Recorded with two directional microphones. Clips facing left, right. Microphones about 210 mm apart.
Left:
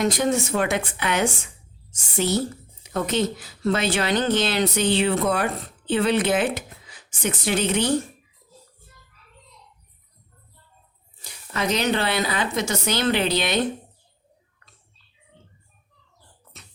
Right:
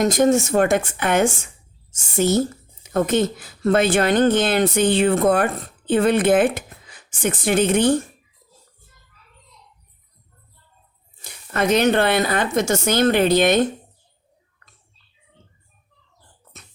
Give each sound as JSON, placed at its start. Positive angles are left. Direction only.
{"t": 0.0, "sound": "speech", "side_deg": -45}
{"t": 11.2, "sound": "speech", "side_deg": -55}